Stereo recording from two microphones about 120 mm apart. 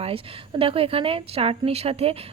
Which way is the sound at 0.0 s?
50° right (ahead or behind).